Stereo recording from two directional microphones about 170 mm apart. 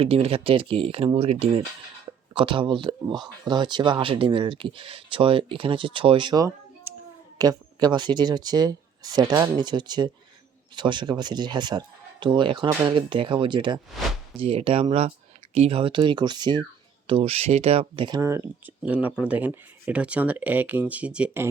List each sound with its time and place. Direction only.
0.0 s speech: 35° right (ahead or behind)
18.2 s speech: 15° right (ahead or behind)